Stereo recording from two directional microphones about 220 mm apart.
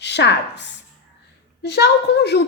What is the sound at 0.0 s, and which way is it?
A woman's voice, 50° left (ahead or behind).